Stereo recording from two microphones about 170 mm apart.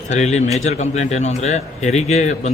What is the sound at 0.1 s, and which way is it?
A man's voice, 40° left (ahead or behind).